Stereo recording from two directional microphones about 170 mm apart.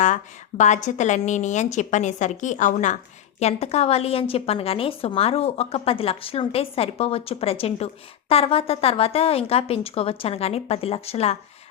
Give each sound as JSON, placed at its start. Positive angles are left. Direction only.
{"t": 0.0, "sound": "a woman's voice", "side_deg": 45}